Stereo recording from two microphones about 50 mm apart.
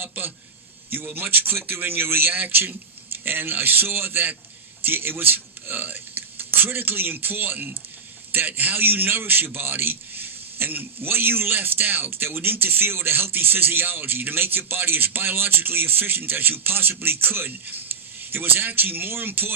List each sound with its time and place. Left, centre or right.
0.0 s a man's voice: right